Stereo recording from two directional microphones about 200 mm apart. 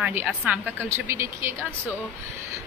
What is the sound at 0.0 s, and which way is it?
A woman's voice, 10° right (ahead or behind).